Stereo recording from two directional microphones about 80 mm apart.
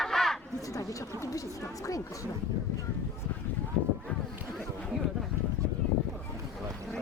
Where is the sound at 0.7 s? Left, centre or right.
Left.